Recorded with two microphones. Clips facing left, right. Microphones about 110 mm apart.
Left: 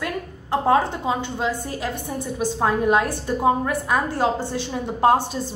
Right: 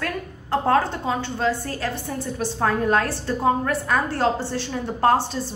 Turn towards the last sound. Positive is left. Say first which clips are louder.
# left 1 dB
turn(degrees=15)  # may be behind; listen again after turning